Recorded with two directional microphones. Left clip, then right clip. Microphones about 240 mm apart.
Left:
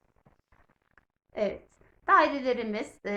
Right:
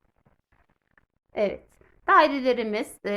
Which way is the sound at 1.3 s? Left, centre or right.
Right.